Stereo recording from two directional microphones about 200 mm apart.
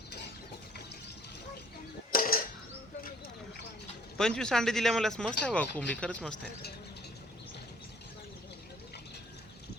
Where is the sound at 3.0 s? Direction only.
50° left (ahead or behind).